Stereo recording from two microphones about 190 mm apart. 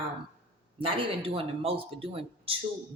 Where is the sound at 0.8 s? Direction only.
30° right (ahead or behind).